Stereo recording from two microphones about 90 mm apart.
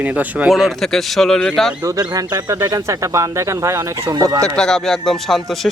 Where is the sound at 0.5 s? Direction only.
Centre (ahead or behind).